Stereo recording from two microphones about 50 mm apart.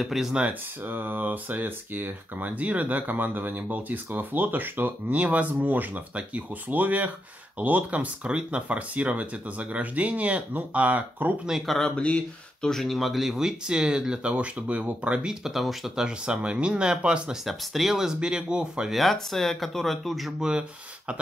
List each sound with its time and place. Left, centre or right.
0.0 s speech: centre
0.3 s speech: right
0.8 s speech: right
2.4 s speech: right
5.1 s speech: right
11.6 s speech: centre
11.9 s speech: left
12.6 s speech: centre; by 15.1 s right
15.2 s speech: centre
16.1 s speech: right
17.5 s speech: centre
18.0 s speech: centre
18.9 s speech: centre